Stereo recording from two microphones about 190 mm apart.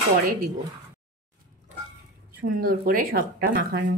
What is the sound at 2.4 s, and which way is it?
Speech, 50° right (ahead or behind).